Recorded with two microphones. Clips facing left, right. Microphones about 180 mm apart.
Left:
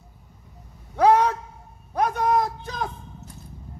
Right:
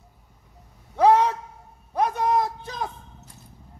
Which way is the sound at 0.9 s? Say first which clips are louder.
Even; centre (ahead or behind).